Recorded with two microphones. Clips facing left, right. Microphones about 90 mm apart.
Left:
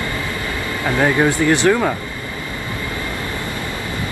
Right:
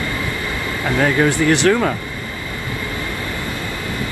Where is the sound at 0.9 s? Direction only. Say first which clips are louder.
Even; 20° left (ahead or behind).